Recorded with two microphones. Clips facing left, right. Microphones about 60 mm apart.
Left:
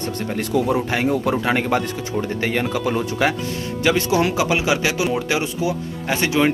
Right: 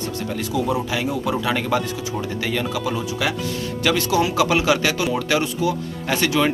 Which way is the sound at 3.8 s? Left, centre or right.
Left.